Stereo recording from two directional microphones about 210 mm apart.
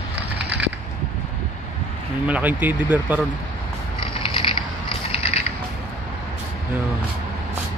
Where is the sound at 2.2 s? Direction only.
5° right (ahead or behind).